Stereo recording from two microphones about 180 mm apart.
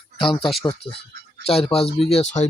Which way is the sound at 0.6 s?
15° left (ahead or behind).